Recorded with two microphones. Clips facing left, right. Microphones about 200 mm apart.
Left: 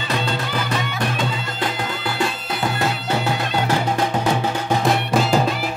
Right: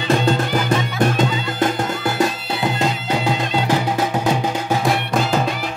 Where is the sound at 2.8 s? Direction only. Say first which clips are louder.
Right 2 dB; 15° right (ahead or behind).